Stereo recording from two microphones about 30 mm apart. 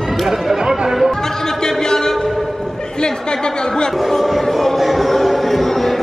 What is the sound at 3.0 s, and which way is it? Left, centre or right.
Chatter, left.